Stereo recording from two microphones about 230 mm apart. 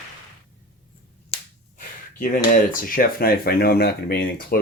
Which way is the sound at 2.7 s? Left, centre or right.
Left.